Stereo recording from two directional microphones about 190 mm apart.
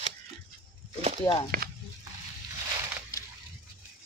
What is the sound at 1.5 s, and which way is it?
Speech, 50° right (ahead or behind).